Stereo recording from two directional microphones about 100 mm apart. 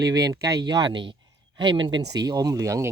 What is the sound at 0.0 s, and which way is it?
Speech, 40° right (ahead or behind).